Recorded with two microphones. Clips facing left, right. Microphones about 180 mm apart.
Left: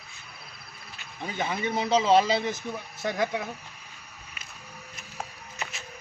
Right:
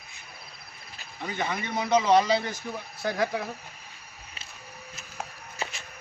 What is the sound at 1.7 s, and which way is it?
Speech, 25° left (ahead or behind).